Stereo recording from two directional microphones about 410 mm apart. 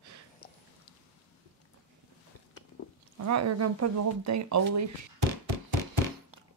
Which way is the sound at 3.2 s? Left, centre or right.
Right.